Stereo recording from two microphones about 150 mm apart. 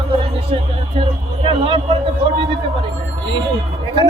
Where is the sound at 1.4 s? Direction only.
35° right (ahead or behind).